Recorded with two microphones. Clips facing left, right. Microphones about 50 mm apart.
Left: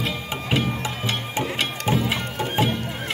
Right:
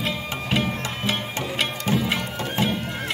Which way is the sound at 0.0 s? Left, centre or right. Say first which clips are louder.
Even; centre.